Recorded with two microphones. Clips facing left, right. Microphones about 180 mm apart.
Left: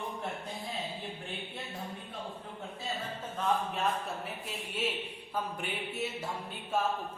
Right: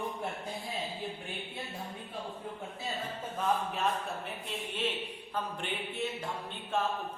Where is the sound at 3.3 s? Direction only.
Centre (ahead or behind).